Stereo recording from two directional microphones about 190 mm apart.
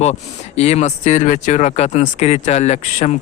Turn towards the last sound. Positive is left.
turn(degrees=35)  # may be behind; listen again after turning